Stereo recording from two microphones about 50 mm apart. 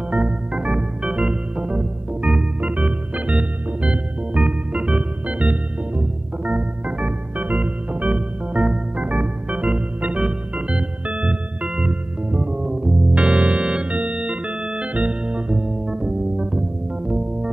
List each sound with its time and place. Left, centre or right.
0.1 s organ: centre
2.6 s organ: right
5.4 s music: right
6.5 s organ: right